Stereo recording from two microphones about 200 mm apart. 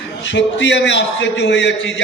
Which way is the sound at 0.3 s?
65° left (ahead or behind).